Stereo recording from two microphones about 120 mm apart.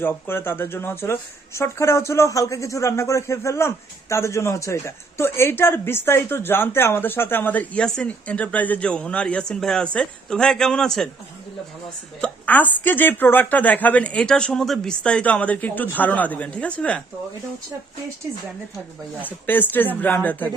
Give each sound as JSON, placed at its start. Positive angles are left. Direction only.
{"t": 0.0, "sound": "speech", "side_deg": 20}
{"t": 12.2, "sound": "speech", "side_deg": 15}
{"t": 19.5, "sound": "speech", "side_deg": 15}